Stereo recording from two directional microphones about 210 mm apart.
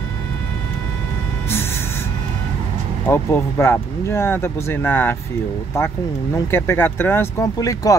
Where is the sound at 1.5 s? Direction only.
10° left (ahead or behind).